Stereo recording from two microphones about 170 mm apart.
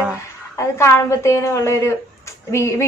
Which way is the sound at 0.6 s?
15° left (ahead or behind).